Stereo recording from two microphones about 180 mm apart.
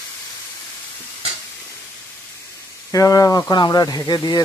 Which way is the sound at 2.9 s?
20° left (ahead or behind).